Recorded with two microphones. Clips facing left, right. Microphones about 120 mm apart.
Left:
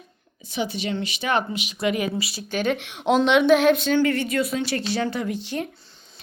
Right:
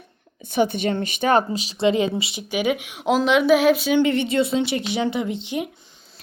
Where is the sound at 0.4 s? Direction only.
55° right (ahead or behind); by 2.4 s 25° right (ahead or behind).